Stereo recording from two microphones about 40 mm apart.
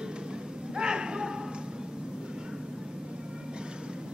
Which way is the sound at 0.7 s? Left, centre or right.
Right.